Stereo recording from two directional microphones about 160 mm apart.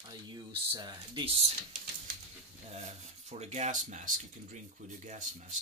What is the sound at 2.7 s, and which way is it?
Speech, 45° right (ahead or behind).